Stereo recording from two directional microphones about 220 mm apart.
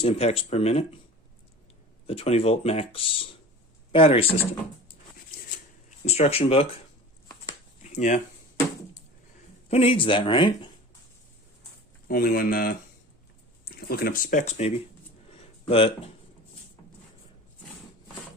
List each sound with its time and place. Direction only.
0.0 s speech: 25° left (ahead or behind)
2.0 s speech: 25° left (ahead or behind)
6.1 s speech: 30° left (ahead or behind)
7.4 s a sound: 30° left (ahead or behind)
9.6 s speech: 25° left (ahead or behind)
12.0 s speech: 40° left (ahead or behind)
15.3 s a sound: 25° left (ahead or behind)